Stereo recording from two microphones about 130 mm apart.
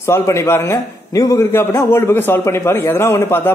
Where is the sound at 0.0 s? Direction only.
20° left (ahead or behind).